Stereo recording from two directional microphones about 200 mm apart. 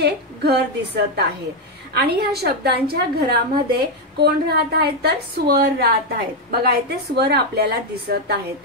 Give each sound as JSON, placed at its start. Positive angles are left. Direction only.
{"t": 0.0, "sound": "a woman's voice", "side_deg": -55}